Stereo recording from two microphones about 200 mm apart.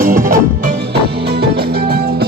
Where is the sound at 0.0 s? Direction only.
40° right (ahead or behind).